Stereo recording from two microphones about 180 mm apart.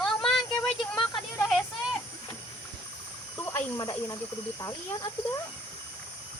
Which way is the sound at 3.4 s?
15° left (ahead or behind).